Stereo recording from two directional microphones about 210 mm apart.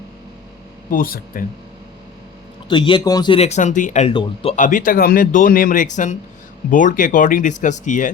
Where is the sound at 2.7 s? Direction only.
25° left (ahead or behind).